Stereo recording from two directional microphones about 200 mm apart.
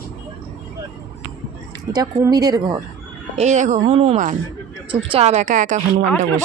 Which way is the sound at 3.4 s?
35° right (ahead or behind).